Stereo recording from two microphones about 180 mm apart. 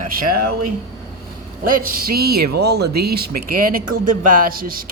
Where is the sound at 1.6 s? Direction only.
50° right (ahead or behind).